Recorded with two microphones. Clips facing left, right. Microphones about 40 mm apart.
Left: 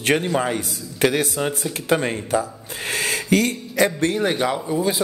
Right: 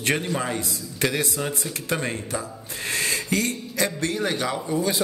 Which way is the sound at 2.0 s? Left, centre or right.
Left.